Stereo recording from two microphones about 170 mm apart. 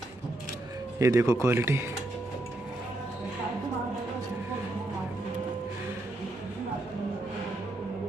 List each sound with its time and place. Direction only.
0.9 s speech: 15° right (ahead or behind)